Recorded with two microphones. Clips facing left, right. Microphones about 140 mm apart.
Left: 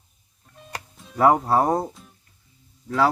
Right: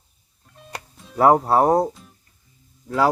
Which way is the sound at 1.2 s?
30° right (ahead or behind).